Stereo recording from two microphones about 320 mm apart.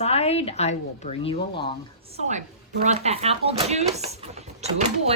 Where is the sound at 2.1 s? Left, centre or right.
Right.